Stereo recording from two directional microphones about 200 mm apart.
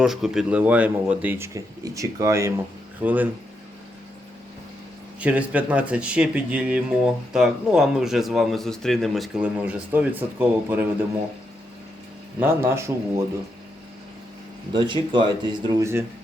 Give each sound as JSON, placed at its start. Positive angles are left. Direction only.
{"t": 0.0, "sound": "speech", "side_deg": 0}
{"t": 5.2, "sound": "speech", "side_deg": -5}
{"t": 12.4, "sound": "speech", "side_deg": -10}
{"t": 14.7, "sound": "speech", "side_deg": -20}